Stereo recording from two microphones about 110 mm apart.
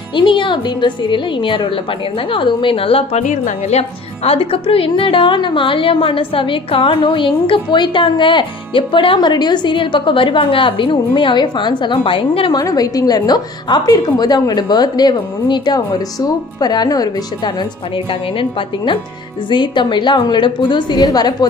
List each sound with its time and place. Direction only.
0.1 s a woman's voice: 50° left (ahead or behind)
12.5 s a woman's voice: 35° left (ahead or behind)
17.9 s a woman's voice: 50° left (ahead or behind)